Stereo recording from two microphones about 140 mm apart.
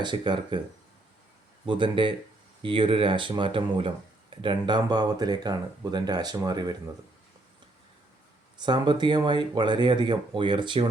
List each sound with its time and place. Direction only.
0.0 s speech: 35° right (ahead or behind)
1.6 s speech: 35° right (ahead or behind)
8.5 s speech: 30° right (ahead or behind)